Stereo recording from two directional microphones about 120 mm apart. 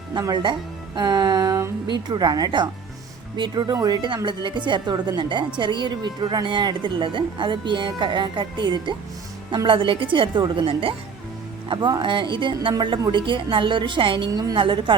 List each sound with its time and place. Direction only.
0.1 s speech: 35° right (ahead or behind)
0.9 s a sound: 35° right (ahead or behind)
1.9 s a woman's voice: 35° right (ahead or behind)
11.7 s a woman's voice: 40° right (ahead or behind)